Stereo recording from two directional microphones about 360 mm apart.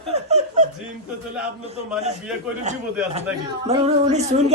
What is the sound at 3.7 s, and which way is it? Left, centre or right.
Speech, centre.